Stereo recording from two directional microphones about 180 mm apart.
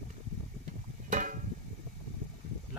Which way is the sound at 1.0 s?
45° right (ahead or behind).